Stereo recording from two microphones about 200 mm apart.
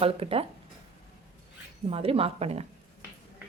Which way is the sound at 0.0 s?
30° right (ahead or behind).